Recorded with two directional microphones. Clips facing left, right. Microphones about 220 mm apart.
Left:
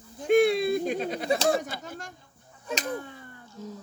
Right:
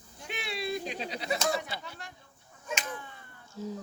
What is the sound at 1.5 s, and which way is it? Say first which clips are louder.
Speech: left 5 dB; 45° left (ahead or behind).